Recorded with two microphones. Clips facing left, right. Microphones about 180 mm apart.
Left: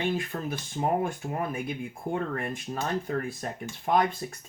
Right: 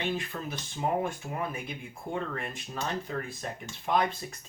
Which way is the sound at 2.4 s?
50° left (ahead or behind).